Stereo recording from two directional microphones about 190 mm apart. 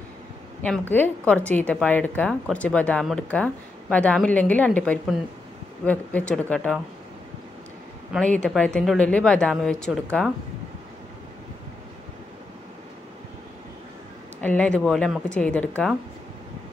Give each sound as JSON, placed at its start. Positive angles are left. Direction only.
{"t": 0.6, "sound": "a woman's voice", "side_deg": 10}
{"t": 8.4, "sound": "a woman's voice", "side_deg": 5}
{"t": 14.4, "sound": "a woman's voice", "side_deg": 5}